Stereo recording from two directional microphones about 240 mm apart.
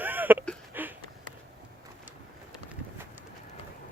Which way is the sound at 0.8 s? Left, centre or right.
Centre.